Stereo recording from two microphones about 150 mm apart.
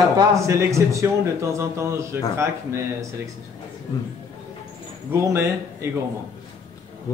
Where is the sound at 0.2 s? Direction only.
20° right (ahead or behind).